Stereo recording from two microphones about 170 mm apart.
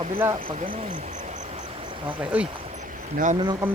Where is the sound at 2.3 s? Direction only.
10° right (ahead or behind).